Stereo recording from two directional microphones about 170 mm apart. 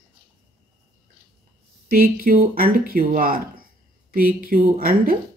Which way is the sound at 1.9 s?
60° right (ahead or behind).